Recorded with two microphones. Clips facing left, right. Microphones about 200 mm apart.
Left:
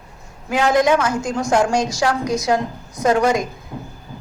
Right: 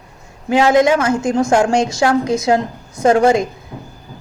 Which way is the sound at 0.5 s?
25° right (ahead or behind).